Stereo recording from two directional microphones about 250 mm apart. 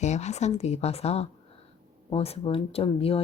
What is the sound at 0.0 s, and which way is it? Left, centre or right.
Speech, left.